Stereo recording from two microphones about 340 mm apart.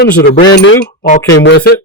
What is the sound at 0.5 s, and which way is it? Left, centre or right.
Speech, left.